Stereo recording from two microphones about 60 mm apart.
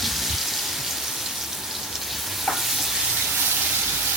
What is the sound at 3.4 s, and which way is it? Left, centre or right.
Water, right.